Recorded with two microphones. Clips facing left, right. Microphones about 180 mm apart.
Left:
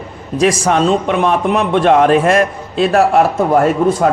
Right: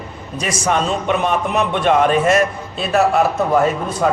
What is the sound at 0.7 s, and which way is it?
Speech, 90° left.